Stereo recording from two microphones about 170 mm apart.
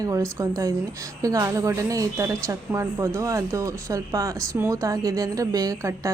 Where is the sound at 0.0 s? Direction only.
20° right (ahead or behind).